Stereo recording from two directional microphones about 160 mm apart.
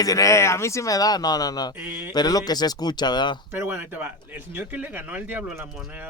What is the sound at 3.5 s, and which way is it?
Speech, 10° right (ahead or behind).